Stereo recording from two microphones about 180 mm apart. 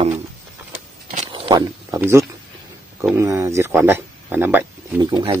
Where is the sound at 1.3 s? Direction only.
25° right (ahead or behind).